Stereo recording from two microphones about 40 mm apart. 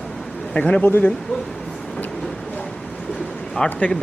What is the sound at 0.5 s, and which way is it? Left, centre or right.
Speech, left.